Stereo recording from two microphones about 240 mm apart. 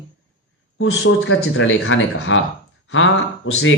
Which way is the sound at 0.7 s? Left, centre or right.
Left.